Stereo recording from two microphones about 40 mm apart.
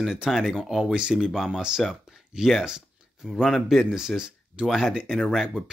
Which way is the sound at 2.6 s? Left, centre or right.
Centre.